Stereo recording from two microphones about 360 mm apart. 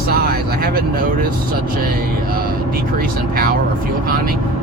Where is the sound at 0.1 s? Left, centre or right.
Right.